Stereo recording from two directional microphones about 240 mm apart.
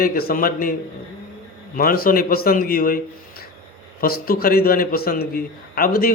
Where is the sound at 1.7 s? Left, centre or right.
Left.